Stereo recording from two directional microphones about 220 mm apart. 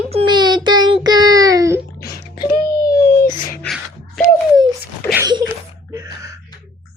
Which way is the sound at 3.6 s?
Centre (ahead or behind).